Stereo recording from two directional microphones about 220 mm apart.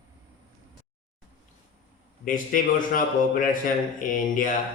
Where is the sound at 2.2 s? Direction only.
40° left (ahead or behind).